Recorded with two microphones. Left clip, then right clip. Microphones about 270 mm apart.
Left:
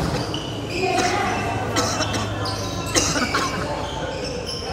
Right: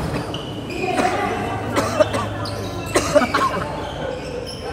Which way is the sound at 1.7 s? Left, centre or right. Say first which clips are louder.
Right 7 dB; right.